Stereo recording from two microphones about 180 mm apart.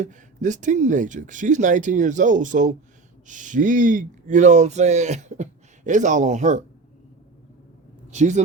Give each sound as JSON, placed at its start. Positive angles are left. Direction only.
{"t": 0.0, "sound": "speech", "side_deg": -45}
{"t": 8.1, "sound": "speech", "side_deg": -40}